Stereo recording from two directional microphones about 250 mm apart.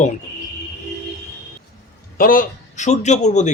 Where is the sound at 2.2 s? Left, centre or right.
Left.